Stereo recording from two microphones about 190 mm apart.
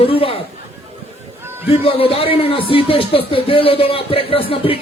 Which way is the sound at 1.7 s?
30° left (ahead or behind).